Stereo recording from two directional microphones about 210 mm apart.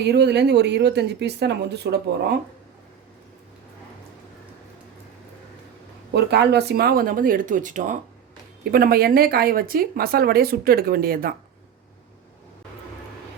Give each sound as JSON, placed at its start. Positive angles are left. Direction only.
{"t": 0.0, "sound": "speech", "side_deg": -50}
{"t": 6.1, "sound": "speech", "side_deg": -50}